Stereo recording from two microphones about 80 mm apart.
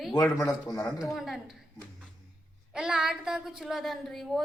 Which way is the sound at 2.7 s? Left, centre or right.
Centre.